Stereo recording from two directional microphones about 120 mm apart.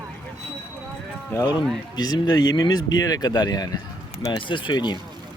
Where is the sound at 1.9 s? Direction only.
35° left (ahead or behind).